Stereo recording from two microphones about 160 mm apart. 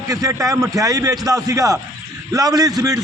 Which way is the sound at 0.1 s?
20° right (ahead or behind).